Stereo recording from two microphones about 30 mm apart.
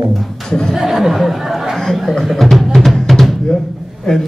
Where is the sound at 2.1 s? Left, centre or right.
Centre.